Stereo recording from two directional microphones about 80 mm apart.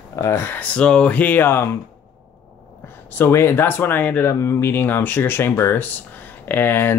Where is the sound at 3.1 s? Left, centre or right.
Left.